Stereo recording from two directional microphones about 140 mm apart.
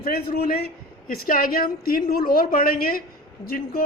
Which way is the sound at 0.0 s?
90° left.